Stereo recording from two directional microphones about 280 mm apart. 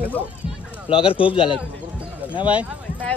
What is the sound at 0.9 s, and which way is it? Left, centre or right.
Speech, centre.